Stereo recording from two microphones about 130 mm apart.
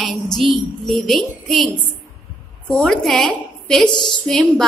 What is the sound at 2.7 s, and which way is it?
Speech, 5° left (ahead or behind).